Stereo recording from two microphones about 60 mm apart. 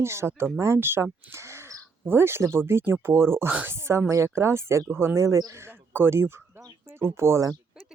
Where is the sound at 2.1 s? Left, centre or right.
Right.